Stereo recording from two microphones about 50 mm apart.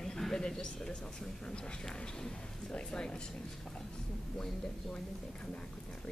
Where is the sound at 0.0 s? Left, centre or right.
Centre.